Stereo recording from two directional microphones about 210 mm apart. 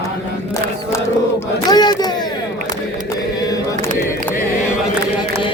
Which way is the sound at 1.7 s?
20° left (ahead or behind).